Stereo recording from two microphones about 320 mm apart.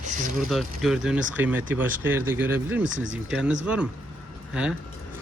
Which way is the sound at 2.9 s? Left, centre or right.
Right.